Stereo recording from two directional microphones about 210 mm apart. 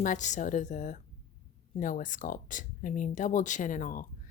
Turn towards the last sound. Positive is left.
turn(degrees=40)  # may be behind; listen again after turning